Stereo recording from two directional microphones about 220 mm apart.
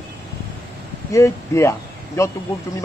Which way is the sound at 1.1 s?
15° left (ahead or behind).